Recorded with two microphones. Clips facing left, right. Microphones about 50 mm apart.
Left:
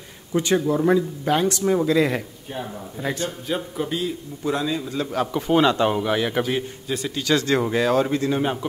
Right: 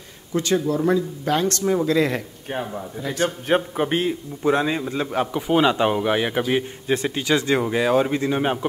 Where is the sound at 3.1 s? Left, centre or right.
Right.